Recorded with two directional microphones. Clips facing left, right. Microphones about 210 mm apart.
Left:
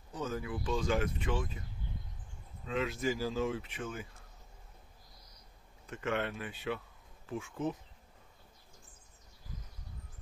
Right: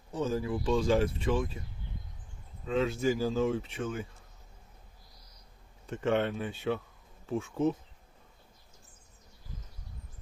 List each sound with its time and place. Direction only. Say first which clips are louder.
0.1 s speech: right 6 dB; 30° right (ahead or behind)
2.7 s speech: right 5 dB; 30° right (ahead or behind)
5.9 s speech: right 6 dB; 30° right (ahead or behind)